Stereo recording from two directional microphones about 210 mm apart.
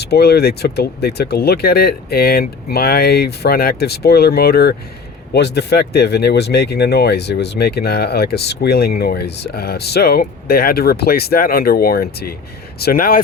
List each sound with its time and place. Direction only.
0.0 s speech: 50° left (ahead or behind)